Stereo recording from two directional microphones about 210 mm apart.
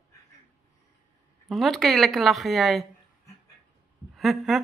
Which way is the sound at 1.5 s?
Centre (ahead or behind).